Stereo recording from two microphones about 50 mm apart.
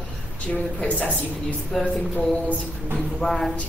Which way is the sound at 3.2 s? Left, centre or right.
Centre.